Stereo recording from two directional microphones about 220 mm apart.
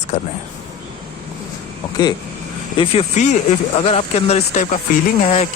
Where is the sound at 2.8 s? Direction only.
30° left (ahead or behind).